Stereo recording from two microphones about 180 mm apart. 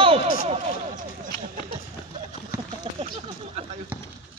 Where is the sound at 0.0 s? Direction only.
30° right (ahead or behind).